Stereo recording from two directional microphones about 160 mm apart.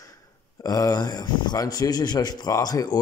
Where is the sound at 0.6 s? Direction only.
20° left (ahead or behind).